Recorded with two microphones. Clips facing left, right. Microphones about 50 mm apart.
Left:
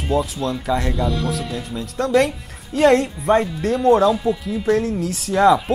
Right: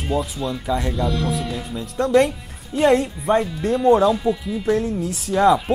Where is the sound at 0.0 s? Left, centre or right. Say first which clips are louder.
Left 2 dB; centre.